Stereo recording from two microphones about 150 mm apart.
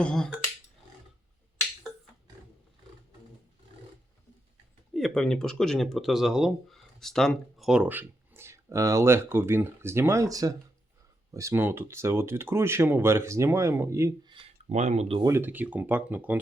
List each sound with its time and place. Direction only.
0.0 s speech: 5° left (ahead or behind)
4.9 s speech: centre (ahead or behind); by 14.1 s 20° right (ahead or behind)
14.7 s speech: 50° right (ahead or behind)
15.2 s speech: 15° right (ahead or behind)